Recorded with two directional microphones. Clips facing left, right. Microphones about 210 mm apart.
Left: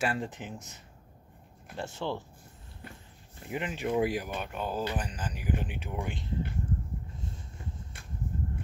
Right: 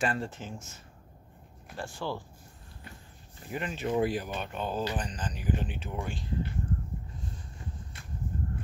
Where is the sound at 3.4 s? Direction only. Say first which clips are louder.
Even; 15° left (ahead or behind).